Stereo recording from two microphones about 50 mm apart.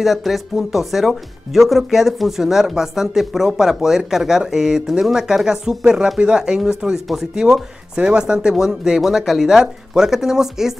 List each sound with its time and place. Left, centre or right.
0.0 s speech: centre